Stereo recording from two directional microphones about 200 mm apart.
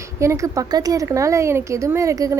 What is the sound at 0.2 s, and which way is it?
Speech, 15° right (ahead or behind).